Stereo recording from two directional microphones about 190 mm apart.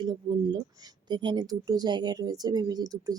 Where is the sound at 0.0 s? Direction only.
20° right (ahead or behind).